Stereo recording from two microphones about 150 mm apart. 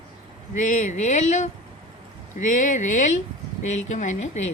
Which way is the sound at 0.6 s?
55° left (ahead or behind).